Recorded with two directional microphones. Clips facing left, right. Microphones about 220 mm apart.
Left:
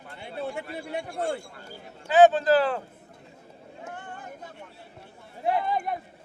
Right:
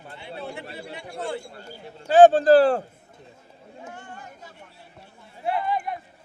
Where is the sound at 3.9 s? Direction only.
55° left (ahead or behind).